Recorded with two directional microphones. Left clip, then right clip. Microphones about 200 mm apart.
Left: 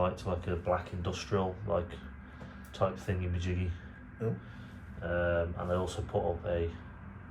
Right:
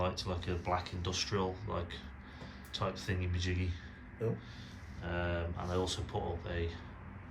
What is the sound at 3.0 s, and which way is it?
Speech, 25° right (ahead or behind).